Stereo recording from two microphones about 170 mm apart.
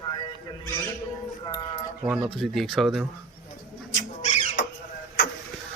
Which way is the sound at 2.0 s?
5° right (ahead or behind).